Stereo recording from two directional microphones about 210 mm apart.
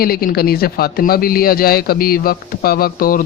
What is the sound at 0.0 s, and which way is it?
A man's voice, 45° left (ahead or behind).